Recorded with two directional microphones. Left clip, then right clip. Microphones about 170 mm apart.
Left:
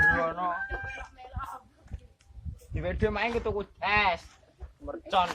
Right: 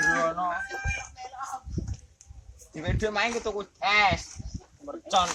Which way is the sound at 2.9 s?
20° left (ahead or behind).